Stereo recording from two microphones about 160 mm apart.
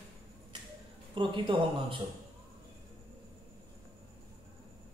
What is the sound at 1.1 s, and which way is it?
Speech, 30° right (ahead or behind).